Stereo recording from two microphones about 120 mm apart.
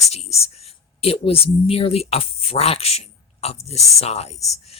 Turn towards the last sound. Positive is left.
turn(degrees=65)  # may be behind; listen again after turning